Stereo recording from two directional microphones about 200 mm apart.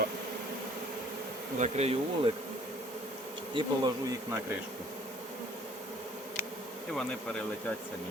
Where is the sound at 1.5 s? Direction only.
35° right (ahead or behind).